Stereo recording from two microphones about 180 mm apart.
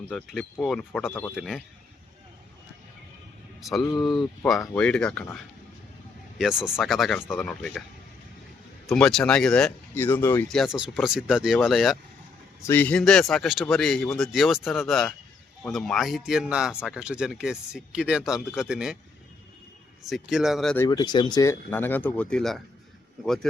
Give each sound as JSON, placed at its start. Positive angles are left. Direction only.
{"t": 0.1, "sound": "speech", "side_deg": 5}
{"t": 3.6, "sound": "speech", "side_deg": 0}
{"t": 6.4, "sound": "speech", "side_deg": -5}
{"t": 8.9, "sound": "speech", "side_deg": 0}
{"t": 10.6, "sound": "speech", "side_deg": -5}
{"t": 12.6, "sound": "speech", "side_deg": 10}
{"t": 20.1, "sound": "speech", "side_deg": 0}
{"t": 20.7, "sound": "speech", "side_deg": 20}